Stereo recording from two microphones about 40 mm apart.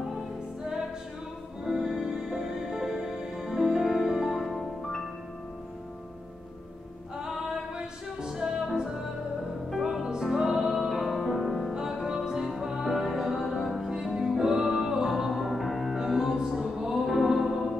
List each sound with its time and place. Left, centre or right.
1.6 s music: centre
7.2 s music: centre
11.7 s music: centre
13.7 s music: centre